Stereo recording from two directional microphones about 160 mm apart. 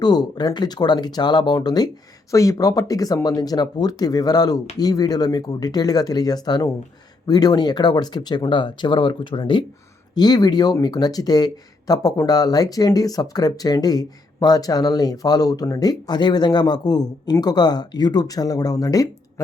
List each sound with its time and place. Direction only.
0.0 s speech: 25° left (ahead or behind)